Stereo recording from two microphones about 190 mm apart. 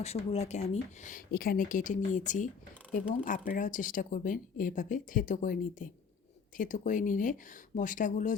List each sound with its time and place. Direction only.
0.0 s speech: 35° left (ahead or behind)